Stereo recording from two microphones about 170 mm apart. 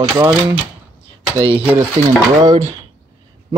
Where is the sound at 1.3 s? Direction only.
35° right (ahead or behind).